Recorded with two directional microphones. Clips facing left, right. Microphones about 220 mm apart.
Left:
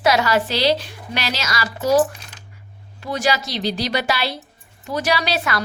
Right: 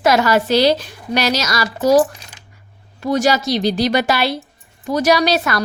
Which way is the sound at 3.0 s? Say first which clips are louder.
Right 6 dB; 45° right (ahead or behind).